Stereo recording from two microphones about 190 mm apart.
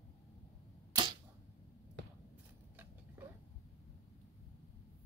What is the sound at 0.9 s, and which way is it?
Camera, 25° right (ahead or behind).